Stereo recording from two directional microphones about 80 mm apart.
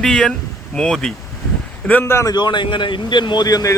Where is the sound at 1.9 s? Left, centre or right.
Left.